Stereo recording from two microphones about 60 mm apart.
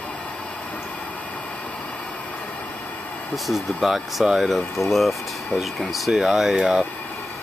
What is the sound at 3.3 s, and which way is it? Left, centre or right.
Speech, centre.